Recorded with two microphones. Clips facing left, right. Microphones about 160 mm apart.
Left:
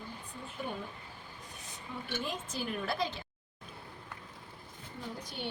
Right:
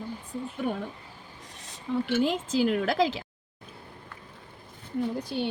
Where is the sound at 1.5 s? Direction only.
90° right.